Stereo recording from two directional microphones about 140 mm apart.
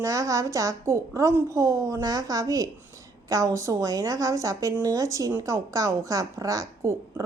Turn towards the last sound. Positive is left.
turn(degrees=-20)  # may be behind; listen again after turning